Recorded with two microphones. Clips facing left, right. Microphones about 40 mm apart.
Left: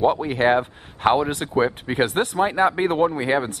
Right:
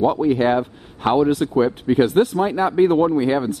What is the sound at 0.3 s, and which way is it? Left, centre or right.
Speech, left.